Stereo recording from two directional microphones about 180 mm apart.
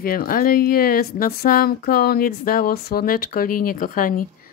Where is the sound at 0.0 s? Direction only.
50° left (ahead or behind).